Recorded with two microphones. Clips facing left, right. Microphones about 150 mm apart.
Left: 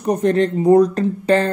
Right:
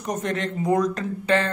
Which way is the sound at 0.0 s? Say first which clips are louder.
Left 10 dB; 35° left (ahead or behind).